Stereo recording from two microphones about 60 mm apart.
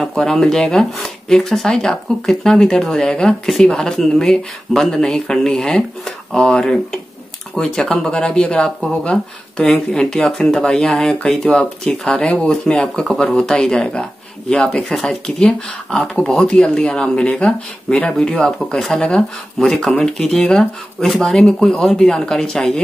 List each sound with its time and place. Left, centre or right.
0.0 s speech: centre
14.7 s speech: centre